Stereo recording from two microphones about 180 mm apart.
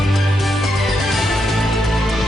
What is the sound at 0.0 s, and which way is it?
Music, centre (ahead or behind).